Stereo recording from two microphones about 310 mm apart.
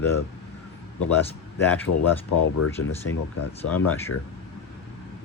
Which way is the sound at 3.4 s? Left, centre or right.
Left.